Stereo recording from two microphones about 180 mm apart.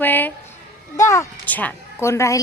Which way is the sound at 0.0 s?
10° left (ahead or behind).